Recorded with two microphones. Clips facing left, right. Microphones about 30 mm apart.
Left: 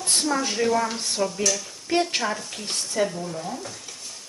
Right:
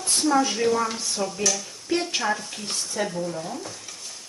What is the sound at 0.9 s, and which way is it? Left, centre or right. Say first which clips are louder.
Stir: left 1 dB; left.